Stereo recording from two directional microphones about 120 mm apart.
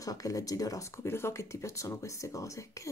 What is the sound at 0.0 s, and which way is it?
Speech, 30° left (ahead or behind).